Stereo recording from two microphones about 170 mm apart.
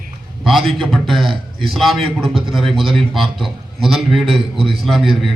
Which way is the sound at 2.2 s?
30° right (ahead or behind).